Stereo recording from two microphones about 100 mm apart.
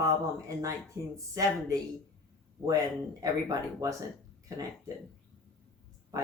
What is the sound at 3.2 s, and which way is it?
Speech, 35° right (ahead or behind).